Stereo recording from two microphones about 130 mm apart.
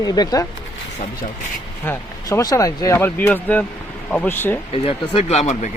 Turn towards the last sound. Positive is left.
turn(degrees=55)  # may be behind; listen again after turning